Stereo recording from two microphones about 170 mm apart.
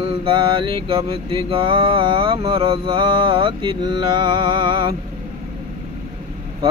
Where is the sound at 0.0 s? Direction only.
30° right (ahead or behind).